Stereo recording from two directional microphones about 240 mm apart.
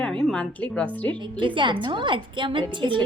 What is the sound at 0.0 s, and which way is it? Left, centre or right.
Music, centre.